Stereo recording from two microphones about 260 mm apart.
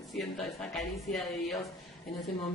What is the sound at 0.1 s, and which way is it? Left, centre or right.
Speech, centre.